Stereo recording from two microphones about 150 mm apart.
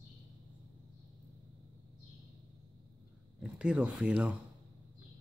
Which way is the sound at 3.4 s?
5° right (ahead or behind).